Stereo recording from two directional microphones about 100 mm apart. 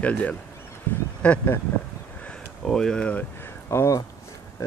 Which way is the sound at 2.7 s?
5° left (ahead or behind).